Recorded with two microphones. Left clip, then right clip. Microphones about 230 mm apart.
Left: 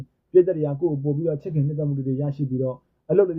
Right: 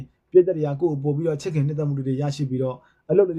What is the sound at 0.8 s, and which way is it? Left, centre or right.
Speech, right.